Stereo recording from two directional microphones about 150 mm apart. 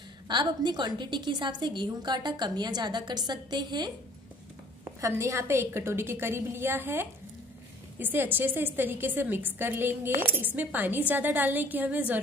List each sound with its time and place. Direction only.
0.3 s a woman's voice: 30° right (ahead or behind)
5.0 s a woman's voice: 20° right (ahead or behind)